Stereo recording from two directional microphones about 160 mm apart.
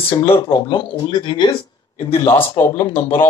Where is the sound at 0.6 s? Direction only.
30° left (ahead or behind).